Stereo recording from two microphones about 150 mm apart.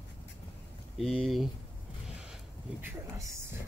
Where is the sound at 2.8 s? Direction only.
20° right (ahead or behind).